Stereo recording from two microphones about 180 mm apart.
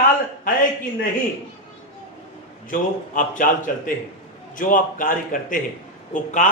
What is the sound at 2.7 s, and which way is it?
Speech, 45° left (ahead or behind).